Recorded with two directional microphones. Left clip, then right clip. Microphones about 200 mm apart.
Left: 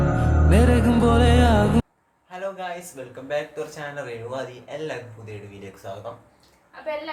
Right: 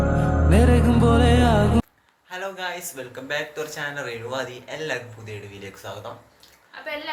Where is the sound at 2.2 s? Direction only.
5° right (ahead or behind).